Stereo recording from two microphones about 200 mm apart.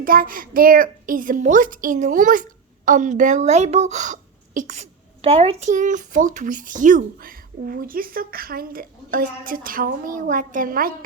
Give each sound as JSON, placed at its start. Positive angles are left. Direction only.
{"t": 0.0, "sound": "a woman's voice", "side_deg": -45}